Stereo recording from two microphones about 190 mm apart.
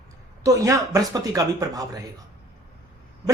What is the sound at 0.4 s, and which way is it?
A woman's voice, 15° right (ahead or behind).